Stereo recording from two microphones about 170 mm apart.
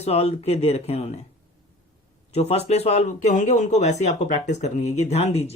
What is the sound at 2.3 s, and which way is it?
Speech, 40° left (ahead or behind).